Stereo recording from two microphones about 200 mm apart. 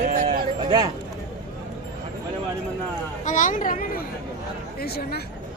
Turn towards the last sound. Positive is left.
turn(degrees=50)  # may be behind; listen again after turning